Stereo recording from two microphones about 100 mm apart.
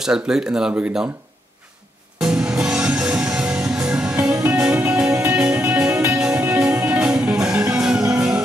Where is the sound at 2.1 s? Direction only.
5° right (ahead or behind).